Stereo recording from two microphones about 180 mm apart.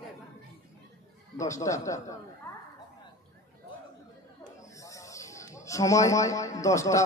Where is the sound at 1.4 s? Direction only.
15° left (ahead or behind).